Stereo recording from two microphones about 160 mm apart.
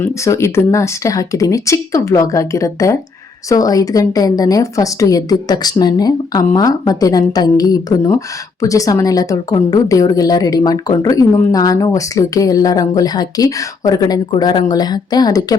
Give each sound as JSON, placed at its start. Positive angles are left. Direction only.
{"t": 0.0, "sound": "a woman's voice", "side_deg": 15}